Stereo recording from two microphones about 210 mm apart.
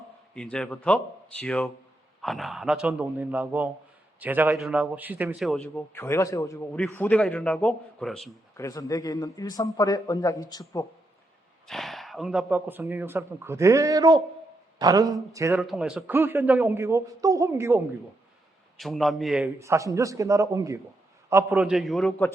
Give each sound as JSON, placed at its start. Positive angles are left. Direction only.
{"t": 0.3, "sound": "a man's voice", "side_deg": 5}
{"t": 8.5, "sound": "a man's voice", "side_deg": 15}
{"t": 11.7, "sound": "speech", "side_deg": 0}
{"t": 15.5, "sound": "speech", "side_deg": 0}
{"t": 18.8, "sound": "a man's voice", "side_deg": 0}
{"t": 19.5, "sound": "speech", "side_deg": -15}
{"t": 21.5, "sound": "a man's voice", "side_deg": 0}